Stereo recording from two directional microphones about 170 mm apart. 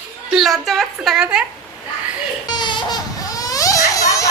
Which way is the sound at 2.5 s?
25° left (ahead or behind).